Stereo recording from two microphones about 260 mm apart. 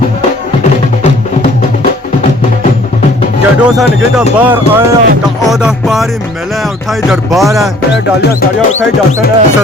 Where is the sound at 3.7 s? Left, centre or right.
Centre.